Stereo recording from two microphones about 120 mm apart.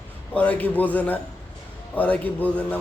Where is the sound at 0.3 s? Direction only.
10° left (ahead or behind).